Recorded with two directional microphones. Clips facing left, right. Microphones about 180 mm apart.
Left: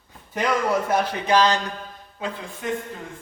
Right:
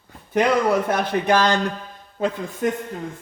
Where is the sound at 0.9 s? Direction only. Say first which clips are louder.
Right 2 dB; 55° right (ahead or behind).